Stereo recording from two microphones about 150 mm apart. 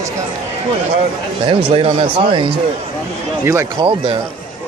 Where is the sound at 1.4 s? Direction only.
35° right (ahead or behind).